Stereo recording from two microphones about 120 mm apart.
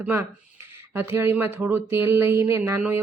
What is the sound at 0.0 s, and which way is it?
A woman's voice, 20° right (ahead or behind).